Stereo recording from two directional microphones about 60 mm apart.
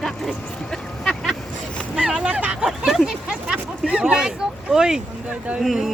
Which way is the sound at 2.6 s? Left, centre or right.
Centre.